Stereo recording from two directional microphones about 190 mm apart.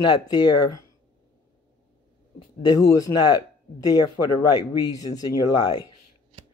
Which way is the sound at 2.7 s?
20° left (ahead or behind).